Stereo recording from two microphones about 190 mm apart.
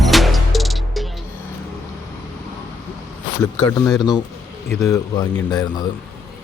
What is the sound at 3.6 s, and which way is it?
Speech, 15° left (ahead or behind).